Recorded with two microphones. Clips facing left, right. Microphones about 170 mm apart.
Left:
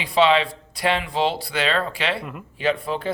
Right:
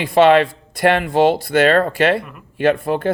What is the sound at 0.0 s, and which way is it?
Speech, 50° right (ahead or behind).